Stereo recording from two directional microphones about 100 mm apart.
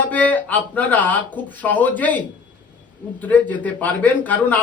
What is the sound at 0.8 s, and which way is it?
A man's voice, 15° left (ahead or behind).